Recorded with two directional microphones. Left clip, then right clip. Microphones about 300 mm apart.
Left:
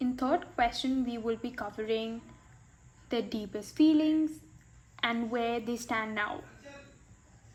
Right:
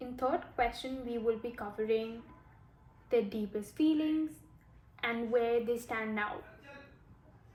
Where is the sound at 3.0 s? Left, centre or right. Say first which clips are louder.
Right 2 dB; left.